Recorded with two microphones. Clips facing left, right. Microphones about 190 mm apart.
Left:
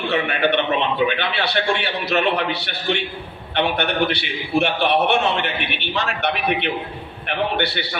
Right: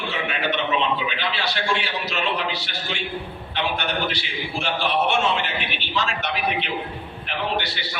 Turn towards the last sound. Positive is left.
turn(degrees=65)  # may be behind; listen again after turning